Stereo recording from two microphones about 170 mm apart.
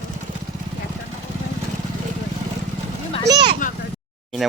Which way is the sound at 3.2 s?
25° right (ahead or behind).